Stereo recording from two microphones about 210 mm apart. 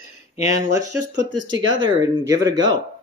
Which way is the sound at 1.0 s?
65° right (ahead or behind).